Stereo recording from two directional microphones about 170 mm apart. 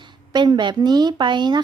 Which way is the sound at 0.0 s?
25° right (ahead or behind).